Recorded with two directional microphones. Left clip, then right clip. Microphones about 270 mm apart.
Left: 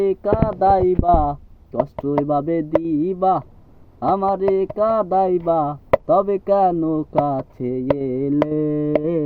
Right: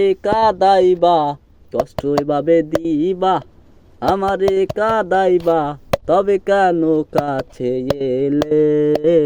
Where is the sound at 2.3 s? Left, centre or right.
Right.